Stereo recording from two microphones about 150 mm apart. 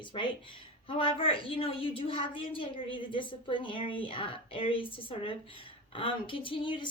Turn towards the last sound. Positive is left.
turn(degrees=30)  # may be behind; listen again after turning